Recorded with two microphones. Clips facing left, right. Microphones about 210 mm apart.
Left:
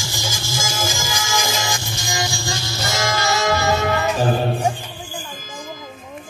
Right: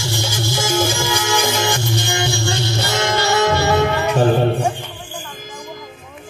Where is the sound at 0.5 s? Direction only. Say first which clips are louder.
Right 7 dB; 60° right (ahead or behind).